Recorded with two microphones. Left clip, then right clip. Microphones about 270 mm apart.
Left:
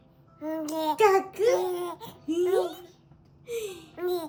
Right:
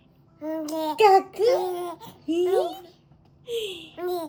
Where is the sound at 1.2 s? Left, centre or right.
Centre.